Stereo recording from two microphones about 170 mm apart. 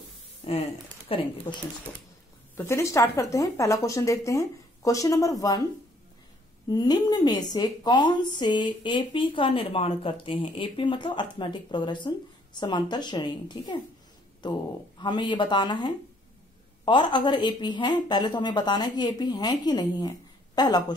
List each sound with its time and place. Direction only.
0.4 s speech: 30° left (ahead or behind)
2.5 s a woman's voice: 15° left (ahead or behind)
6.7 s a woman's voice: 25° left (ahead or behind)